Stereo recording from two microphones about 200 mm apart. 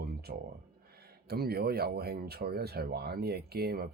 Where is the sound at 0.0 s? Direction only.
50° right (ahead or behind).